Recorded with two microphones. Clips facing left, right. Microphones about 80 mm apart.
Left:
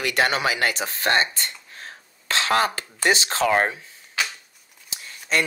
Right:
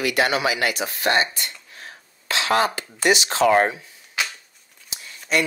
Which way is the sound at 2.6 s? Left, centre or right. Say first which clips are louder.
Right 2 dB; left.